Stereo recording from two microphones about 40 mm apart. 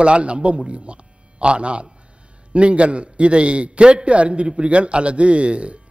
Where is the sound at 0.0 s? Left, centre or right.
Right.